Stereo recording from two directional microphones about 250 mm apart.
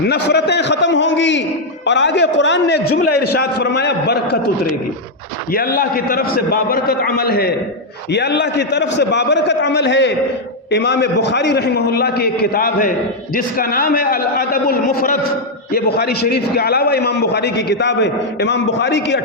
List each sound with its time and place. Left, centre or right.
0.0 s a man's voice: left